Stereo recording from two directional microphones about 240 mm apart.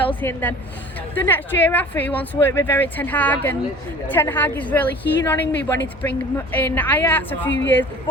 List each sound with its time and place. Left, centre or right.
0.2 s a woman's voice: centre
7.4 s speech: left